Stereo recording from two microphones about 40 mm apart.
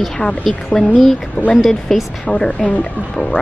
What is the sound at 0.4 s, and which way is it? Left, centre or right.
Speech, centre.